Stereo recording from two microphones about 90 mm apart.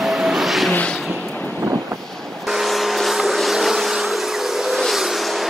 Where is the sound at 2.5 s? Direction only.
5° right (ahead or behind).